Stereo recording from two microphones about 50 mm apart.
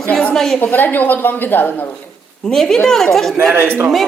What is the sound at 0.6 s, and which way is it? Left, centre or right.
A woman's voice, left.